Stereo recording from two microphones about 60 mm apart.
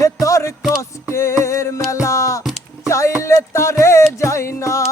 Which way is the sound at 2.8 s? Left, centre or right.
Left.